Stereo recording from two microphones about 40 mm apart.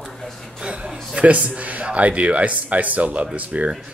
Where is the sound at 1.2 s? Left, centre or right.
Right.